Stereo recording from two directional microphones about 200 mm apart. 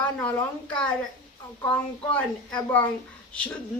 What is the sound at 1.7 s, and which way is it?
Speech, 5° left (ahead or behind).